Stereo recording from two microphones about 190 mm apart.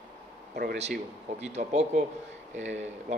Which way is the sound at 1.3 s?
35° right (ahead or behind).